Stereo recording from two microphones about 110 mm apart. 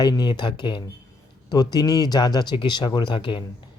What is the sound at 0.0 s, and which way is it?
Speech, 40° left (ahead or behind).